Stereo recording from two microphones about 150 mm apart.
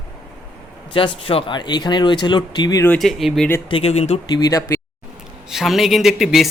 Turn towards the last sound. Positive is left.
turn(degrees=0)  # may be behind; listen again after turning